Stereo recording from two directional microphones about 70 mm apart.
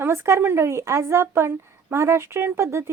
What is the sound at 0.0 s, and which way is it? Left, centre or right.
Speech, right.